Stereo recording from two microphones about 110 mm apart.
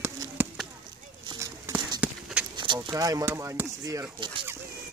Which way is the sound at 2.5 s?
45° right (ahead or behind).